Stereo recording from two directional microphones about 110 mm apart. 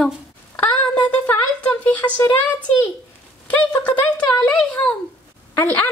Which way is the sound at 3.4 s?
10° left (ahead or behind).